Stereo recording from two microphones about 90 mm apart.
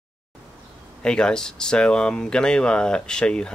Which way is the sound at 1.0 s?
10° left (ahead or behind).